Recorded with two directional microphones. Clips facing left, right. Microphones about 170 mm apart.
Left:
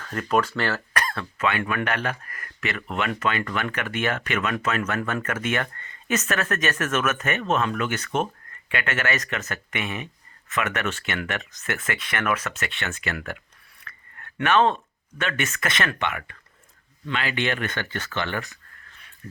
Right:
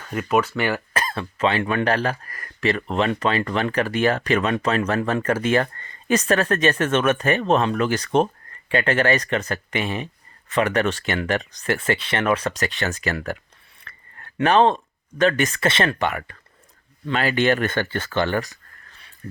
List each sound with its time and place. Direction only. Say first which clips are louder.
0.0 s speech: right 2 dB; 10° right (ahead or behind); by 13.4 s 35° right (ahead or behind)
13.8 s a sound: even; 30° right (ahead or behind)
15.2 s speech: right 9 dB; 35° right (ahead or behind)